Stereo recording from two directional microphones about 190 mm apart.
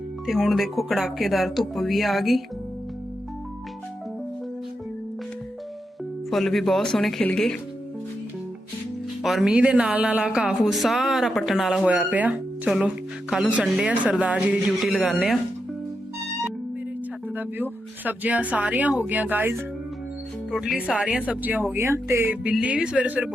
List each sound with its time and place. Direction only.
0.3 s speech: centre (ahead or behind)
6.3 s speech: centre (ahead or behind)
9.2 s speech: centre (ahead or behind)
17.3 s speech: 10° right (ahead or behind)